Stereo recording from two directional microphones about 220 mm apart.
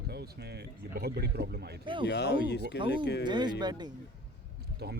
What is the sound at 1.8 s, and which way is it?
Speech, 20° right (ahead or behind).